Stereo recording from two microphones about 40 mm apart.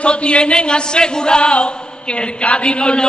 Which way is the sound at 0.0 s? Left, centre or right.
Left.